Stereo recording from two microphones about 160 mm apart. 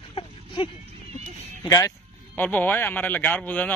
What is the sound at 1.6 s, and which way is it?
Speech, 20° left (ahead or behind).